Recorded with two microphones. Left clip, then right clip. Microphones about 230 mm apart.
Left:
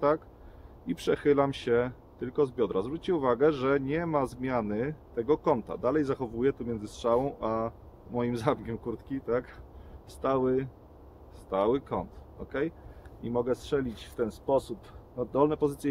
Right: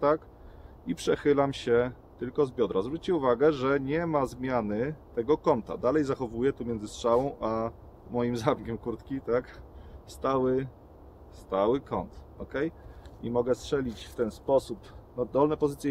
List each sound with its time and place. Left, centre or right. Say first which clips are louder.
0.8 s speech: even; centre